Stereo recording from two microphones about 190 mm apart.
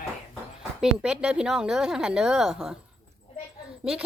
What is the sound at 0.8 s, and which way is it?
A woman's voice, 5° right (ahead or behind).